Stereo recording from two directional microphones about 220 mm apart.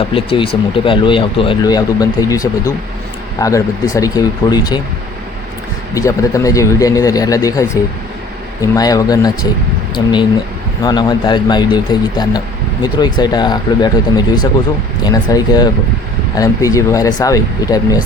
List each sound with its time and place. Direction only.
0.1 s speech: 25° left (ahead or behind)
5.9 s speech: 15° left (ahead or behind)
8.6 s speech: 15° left (ahead or behind)